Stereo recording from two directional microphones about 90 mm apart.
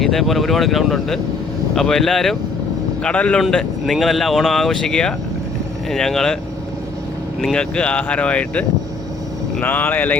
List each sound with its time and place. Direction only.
0.0 s speech: centre (ahead or behind)
7.4 s speech: 10° left (ahead or behind)